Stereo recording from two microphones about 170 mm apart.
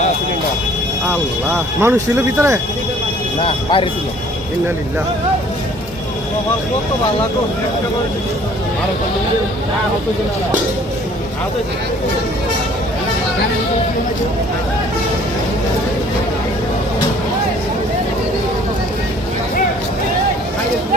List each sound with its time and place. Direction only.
1.8 s speech: 15° right (ahead or behind)
3.4 s speech: 30° left (ahead or behind)